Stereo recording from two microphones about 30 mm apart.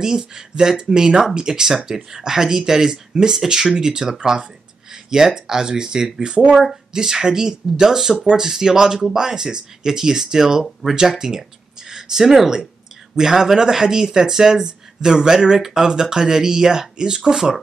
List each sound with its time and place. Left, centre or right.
0.0 s speech: right
6.5 s speech: centre